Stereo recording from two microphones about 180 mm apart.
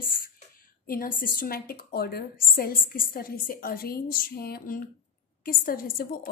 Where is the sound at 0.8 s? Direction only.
50° left (ahead or behind).